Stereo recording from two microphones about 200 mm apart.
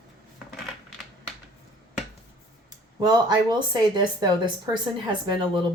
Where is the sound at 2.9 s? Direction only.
20° right (ahead or behind).